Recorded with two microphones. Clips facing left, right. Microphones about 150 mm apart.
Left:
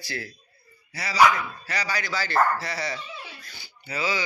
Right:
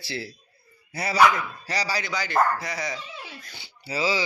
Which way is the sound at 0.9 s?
50° right (ahead or behind).